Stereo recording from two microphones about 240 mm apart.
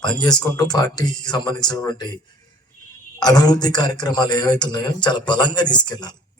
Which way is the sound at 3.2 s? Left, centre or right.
Centre.